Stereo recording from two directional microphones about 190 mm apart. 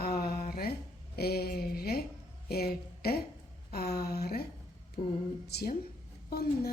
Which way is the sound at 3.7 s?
55° left (ahead or behind).